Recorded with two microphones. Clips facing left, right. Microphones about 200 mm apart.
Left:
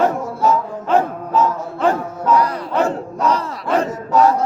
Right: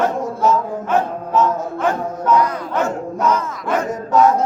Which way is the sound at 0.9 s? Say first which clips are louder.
Left 3 dB; 35° left (ahead or behind).